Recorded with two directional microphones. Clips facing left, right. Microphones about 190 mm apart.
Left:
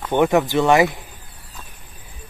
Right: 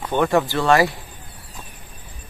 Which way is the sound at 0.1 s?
20° left (ahead or behind).